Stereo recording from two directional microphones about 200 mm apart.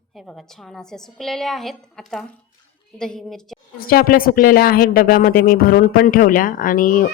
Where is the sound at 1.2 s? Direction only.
Centre (ahead or behind).